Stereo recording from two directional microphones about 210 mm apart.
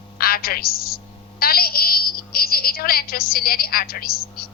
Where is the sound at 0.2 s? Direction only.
45° left (ahead or behind).